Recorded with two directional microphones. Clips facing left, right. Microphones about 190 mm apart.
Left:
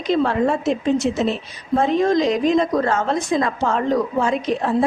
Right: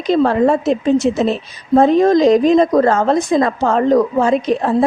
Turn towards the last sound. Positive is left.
turn(degrees=-40)  # may be behind; listen again after turning